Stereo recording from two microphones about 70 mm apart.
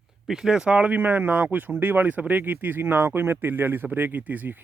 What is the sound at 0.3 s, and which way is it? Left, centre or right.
Speech, centre.